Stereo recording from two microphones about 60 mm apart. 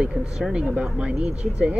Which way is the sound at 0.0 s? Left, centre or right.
Centre.